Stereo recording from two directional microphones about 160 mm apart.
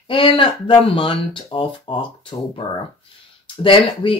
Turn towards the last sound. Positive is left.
turn(degrees=35)  # may be behind; listen again after turning